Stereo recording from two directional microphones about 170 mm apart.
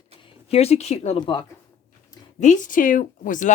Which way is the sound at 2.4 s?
50° left (ahead or behind).